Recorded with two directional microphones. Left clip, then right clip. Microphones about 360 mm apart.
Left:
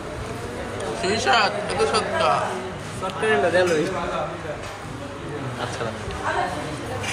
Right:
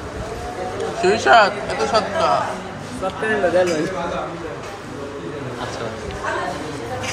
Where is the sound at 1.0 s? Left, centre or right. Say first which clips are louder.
Right 7 dB; right.